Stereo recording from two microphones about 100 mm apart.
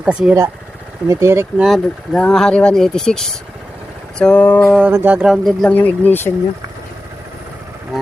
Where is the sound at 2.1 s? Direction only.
10° left (ahead or behind).